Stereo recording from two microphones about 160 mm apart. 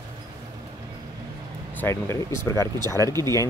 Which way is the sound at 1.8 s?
15° left (ahead or behind).